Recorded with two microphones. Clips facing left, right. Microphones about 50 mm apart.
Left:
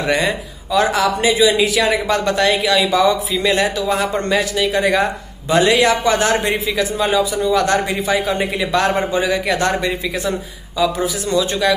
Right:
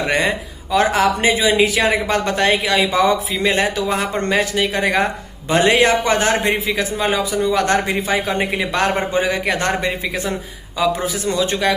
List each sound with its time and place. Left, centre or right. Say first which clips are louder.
0.0 s a man's voice: even; right